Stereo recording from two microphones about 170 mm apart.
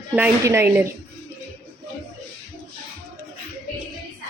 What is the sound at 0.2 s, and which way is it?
Speech, 15° right (ahead or behind).